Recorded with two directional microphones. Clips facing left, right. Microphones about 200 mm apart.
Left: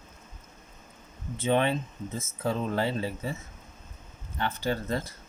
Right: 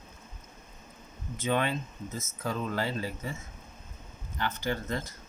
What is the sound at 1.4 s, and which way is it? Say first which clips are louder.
Speech: left 4 dB; 25° left (ahead or behind).